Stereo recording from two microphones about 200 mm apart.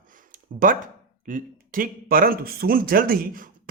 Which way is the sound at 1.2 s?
45° right (ahead or behind).